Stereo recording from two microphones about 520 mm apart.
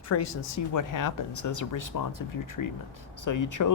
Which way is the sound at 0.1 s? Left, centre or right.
Left.